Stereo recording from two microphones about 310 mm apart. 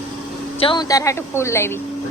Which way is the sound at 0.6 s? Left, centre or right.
Centre.